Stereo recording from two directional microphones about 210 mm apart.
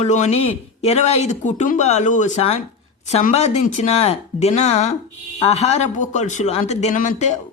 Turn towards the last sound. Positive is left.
turn(degrees=35)  # may be behind; listen again after turning